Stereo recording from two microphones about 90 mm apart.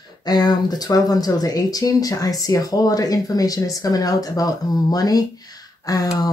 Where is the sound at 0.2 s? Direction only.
50° left (ahead or behind).